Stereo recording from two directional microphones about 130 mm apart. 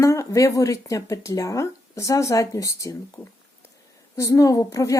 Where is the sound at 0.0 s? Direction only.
25° left (ahead or behind).